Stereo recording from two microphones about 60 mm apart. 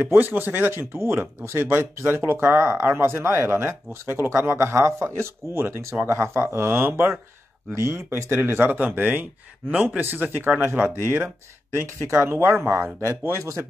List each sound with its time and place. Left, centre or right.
0.0 s speech: right
4.6 s speech: right
7.7 s speech: right
12.5 s speech: right
13.2 s a man's voice: right